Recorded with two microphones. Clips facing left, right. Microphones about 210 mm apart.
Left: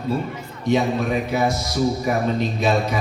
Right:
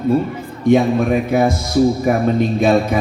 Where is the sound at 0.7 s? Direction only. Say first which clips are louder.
Right 6 dB; 50° right (ahead or behind).